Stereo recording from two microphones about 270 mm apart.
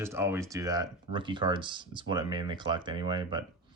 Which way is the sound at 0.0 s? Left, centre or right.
Centre.